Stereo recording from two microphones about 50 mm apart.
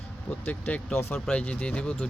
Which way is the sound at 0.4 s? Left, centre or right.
Left.